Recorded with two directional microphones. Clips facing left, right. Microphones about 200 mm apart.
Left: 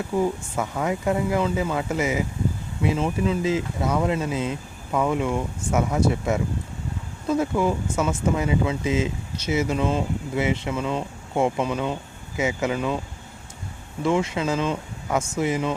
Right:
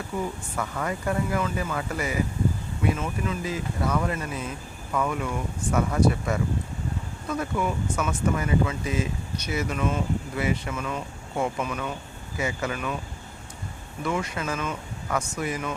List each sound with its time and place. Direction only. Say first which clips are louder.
0.1 s speech: left 8 dB; 25° left (ahead or behind)
14.0 s speech: left 6 dB; 25° left (ahead or behind)